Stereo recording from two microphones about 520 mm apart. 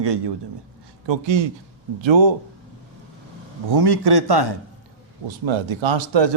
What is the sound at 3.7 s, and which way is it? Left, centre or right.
Speech, right.